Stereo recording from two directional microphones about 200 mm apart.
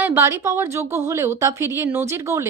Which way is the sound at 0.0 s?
10° right (ahead or behind).